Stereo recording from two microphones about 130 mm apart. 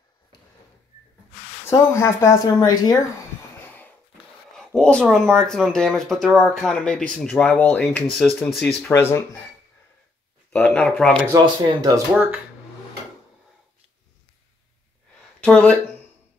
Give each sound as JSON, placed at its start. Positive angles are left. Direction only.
{"t": 1.7, "sound": "speech", "side_deg": 20}
{"t": 3.6, "sound": "a sound", "side_deg": 15}
{"t": 4.6, "sound": "speech", "side_deg": 5}
{"t": 8.9, "sound": "speech", "side_deg": 20}
{"t": 10.5, "sound": "speech", "side_deg": 10}
{"t": 11.3, "sound": "speech", "side_deg": -30}
{"t": 12.1, "sound": "speech", "side_deg": -15}
{"t": 15.4, "sound": "speech", "side_deg": 10}